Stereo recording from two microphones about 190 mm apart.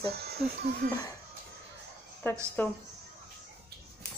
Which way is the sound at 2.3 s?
10° left (ahead or behind).